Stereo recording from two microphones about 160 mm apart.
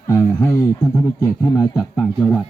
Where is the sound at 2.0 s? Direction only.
5° left (ahead or behind).